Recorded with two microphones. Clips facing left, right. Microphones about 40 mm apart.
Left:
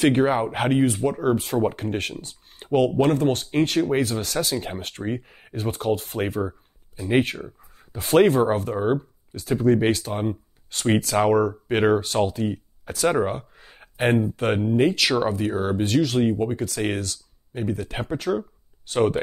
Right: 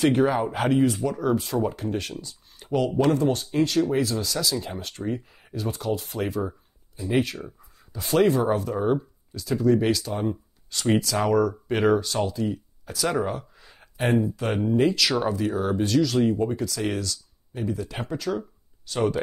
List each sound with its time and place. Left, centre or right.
0.0 s speech: left
2.2 s a sound: left
3.0 s speech: left
8.7 s speech: left
14.6 s speech: left
16.6 s speech: left
18.0 s speech: left